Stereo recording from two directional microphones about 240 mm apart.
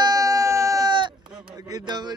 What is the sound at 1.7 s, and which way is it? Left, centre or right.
Music, centre.